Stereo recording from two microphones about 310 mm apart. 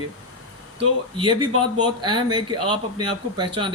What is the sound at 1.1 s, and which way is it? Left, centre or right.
Speech, centre.